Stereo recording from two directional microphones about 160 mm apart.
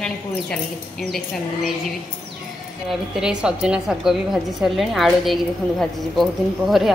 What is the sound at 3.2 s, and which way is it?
A woman's voice, 5° right (ahead or behind).